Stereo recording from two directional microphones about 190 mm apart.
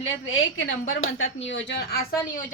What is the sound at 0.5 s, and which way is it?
A woman's voice, 90° left.